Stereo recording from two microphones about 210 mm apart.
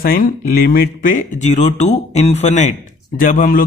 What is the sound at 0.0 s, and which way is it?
A man's voice, 45° left (ahead or behind).